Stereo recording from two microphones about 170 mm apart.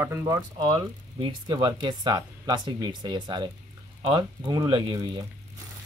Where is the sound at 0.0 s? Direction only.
15° right (ahead or behind).